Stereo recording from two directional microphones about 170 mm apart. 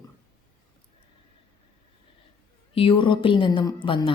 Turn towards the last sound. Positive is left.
turn(degrees=30)  # may be behind; listen again after turning